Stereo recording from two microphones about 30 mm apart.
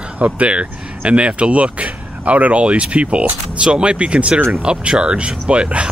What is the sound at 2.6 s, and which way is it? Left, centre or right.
Speech, right.